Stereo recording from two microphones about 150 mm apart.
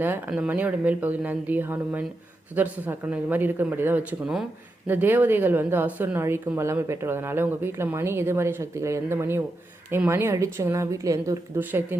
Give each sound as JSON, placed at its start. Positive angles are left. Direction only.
{"t": 0.0, "sound": "speech", "side_deg": -10}